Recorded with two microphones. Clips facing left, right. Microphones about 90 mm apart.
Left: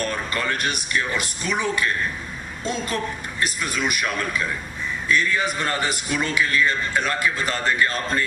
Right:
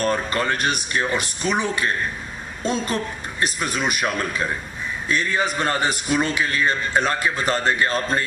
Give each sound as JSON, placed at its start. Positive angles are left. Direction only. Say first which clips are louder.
{"t": 0.0, "sound": "a man's voice", "louder": "right 4 dB", "side_deg": -30}
{"t": 3.4, "sound": "a man's voice", "louder": "right 2 dB", "side_deg": -30}